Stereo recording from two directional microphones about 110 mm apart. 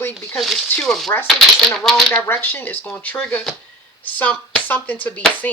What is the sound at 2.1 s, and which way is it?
Speech, 20° left (ahead or behind).